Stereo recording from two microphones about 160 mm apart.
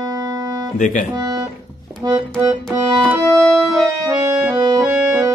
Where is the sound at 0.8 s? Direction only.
55° left (ahead or behind).